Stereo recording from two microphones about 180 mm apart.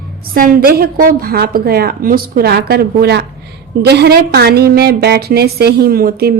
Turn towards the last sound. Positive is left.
turn(degrees=-55)  # may be behind; listen again after turning